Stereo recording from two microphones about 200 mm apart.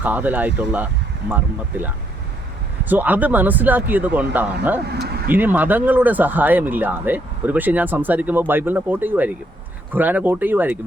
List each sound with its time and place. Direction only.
0.0 s speech: 10° right (ahead or behind)
2.9 s speech: 10° right (ahead or behind)
4.9 s speech: 55° right (ahead or behind)
5.3 s speech: 10° right (ahead or behind)